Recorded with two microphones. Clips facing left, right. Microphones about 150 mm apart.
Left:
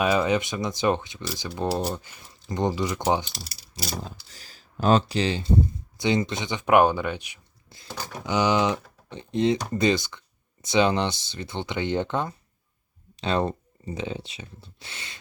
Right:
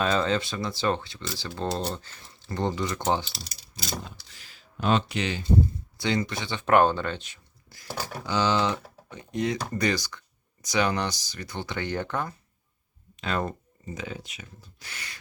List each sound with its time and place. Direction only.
0.0 s speech: 10° left (ahead or behind)
3.8 s speech: 40° left (ahead or behind); by 8.8 s 15° left (ahead or behind)
9.0 s speech: 25° left (ahead or behind)